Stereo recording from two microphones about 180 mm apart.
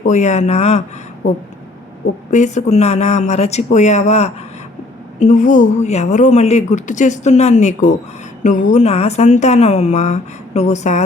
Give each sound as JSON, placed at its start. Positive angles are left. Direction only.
{"t": 0.0, "sound": "speech", "side_deg": 40}
{"t": 2.3, "sound": "speech", "side_deg": 40}